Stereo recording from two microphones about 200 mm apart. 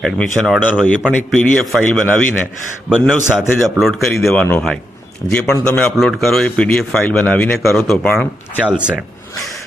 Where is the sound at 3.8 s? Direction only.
Centre (ahead or behind).